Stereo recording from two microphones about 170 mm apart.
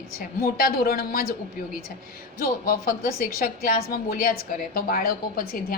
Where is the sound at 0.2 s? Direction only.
55° left (ahead or behind).